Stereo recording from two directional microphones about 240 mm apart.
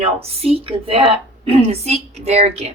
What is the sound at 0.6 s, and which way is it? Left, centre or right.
A woman's voice, right.